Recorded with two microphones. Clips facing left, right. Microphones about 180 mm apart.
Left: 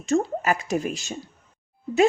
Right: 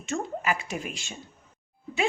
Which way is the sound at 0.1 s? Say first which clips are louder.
Left 7 dB; 40° left (ahead or behind).